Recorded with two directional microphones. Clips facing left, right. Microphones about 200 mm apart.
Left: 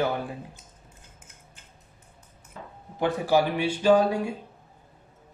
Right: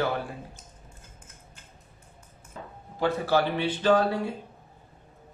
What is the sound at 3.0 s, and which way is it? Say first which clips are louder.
Speech: left 2 dB; 15° left (ahead or behind).